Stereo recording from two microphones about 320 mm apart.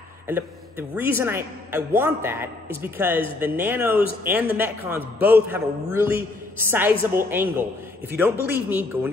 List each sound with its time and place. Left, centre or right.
0.3 s a man's voice: centre
8.5 s speech: centre